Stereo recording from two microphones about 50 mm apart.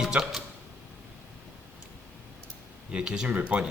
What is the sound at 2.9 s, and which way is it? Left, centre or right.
Speech, centre.